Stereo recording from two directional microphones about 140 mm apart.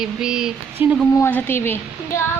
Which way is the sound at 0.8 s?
15° right (ahead or behind).